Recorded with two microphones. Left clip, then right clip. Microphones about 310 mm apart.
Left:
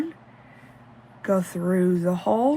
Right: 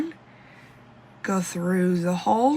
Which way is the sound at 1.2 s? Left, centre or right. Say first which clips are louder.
Left 3 dB; centre.